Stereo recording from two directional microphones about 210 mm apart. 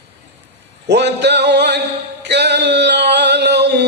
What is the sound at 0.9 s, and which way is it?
Music, 55° right (ahead or behind).